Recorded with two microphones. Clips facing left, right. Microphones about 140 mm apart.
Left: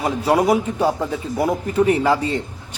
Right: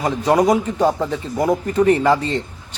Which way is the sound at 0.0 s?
10° left (ahead or behind).